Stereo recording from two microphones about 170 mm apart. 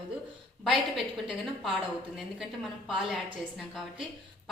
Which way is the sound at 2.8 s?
Centre (ahead or behind).